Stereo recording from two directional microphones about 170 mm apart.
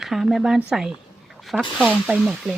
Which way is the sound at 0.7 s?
5° right (ahead or behind).